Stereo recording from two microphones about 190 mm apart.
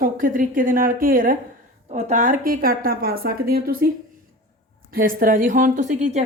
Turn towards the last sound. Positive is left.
turn(degrees=-40)  # may be behind; listen again after turning